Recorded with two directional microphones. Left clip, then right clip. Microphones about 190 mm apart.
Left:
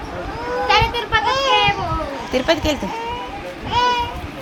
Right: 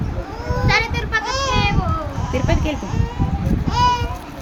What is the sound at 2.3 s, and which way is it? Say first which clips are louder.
Speech: left 5 dB; 5° left (ahead or behind).